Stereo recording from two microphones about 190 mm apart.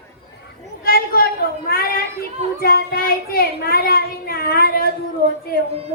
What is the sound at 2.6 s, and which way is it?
Child singing, 50° left (ahead or behind).